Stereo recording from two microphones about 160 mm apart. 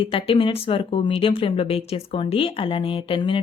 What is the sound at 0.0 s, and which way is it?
Speech, 35° left (ahead or behind).